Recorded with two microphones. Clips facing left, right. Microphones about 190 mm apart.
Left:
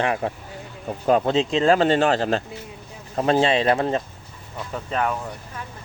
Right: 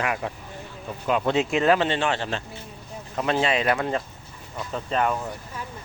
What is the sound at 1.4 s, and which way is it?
Speech, 25° left (ahead or behind).